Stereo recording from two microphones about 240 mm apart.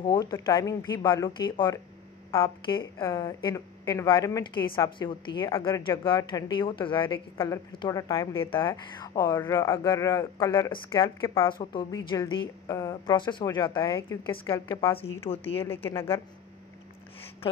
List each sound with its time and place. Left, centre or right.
0.0 s a woman's voice: centre
14.9 s a woman's voice: left